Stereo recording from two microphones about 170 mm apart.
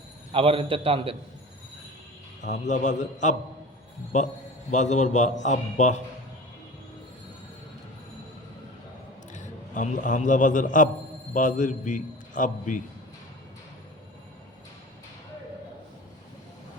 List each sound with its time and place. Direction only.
0.3 s a man's voice: 30° right (ahead or behind)
2.4 s a man's voice: 45° left (ahead or behind)
9.3 s a man's voice: 45° left (ahead or behind)